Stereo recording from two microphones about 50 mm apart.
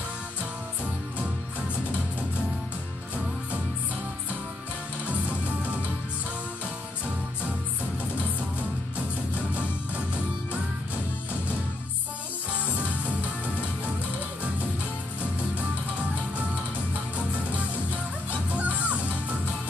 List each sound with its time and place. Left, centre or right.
12.7 s music: right
18.5 s music: right